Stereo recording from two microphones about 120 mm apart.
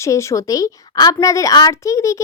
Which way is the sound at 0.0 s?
25° left (ahead or behind).